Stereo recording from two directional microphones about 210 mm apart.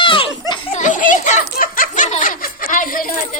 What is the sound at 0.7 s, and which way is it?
Speech, 35° left (ahead or behind).